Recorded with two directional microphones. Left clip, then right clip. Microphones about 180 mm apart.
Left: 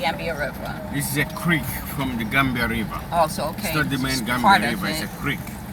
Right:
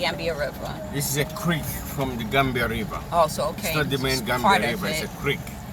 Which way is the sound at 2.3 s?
40° right (ahead or behind).